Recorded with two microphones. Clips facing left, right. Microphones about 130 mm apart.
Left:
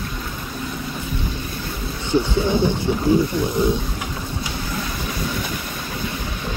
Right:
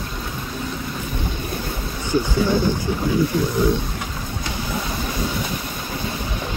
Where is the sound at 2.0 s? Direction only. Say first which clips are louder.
Left 1 dB; 25° left (ahead or behind).